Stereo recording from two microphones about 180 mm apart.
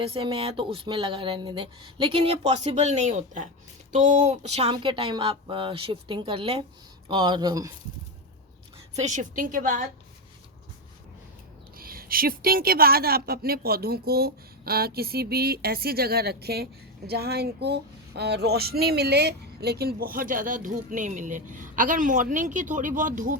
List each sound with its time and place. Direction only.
0.0 s speech: 30° right (ahead or behind)
9.0 s speech: 40° right (ahead or behind)
11.8 s speech: 55° right (ahead or behind)